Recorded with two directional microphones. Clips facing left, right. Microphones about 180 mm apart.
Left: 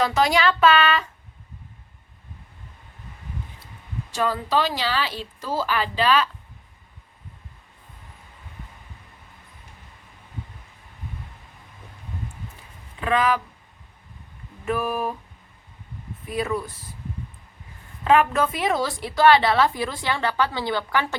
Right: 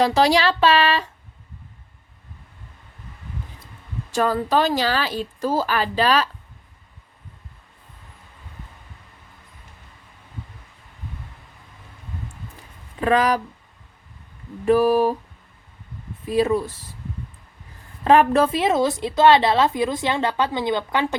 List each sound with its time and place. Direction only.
0.0 s speech: 35° right (ahead or behind)
4.1 s a woman's voice: 45° right (ahead or behind)
13.0 s speech: 40° right (ahead or behind)
14.6 s speech: 35° right (ahead or behind)
16.2 s a woman's voice: 30° right (ahead or behind)
18.0 s a woman's voice: 35° right (ahead or behind); by 21.2 s 20° right (ahead or behind)